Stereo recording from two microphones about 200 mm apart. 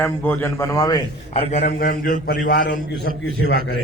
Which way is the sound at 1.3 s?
35° left (ahead or behind).